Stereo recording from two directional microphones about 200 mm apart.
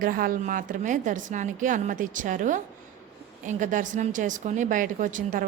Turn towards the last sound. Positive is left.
turn(degrees=-40)  # may be behind; listen again after turning